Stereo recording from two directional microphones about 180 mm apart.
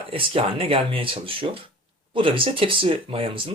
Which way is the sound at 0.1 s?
30° right (ahead or behind).